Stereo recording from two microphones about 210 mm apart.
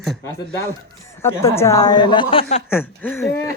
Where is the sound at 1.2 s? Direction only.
10° left (ahead or behind); by 2.6 s 30° left (ahead or behind).